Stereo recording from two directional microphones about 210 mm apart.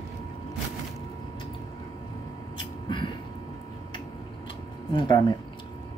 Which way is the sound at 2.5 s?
20° left (ahead or behind).